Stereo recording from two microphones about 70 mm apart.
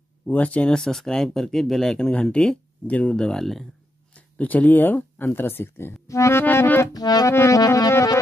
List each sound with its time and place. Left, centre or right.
0.3 s speech: centre
0.7 s speech: centre
4.1 s speech: left
6.4 s speech: left
6.9 s music: left
7.2 s music: left